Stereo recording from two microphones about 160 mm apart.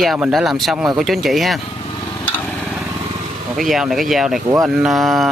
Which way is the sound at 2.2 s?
10° left (ahead or behind).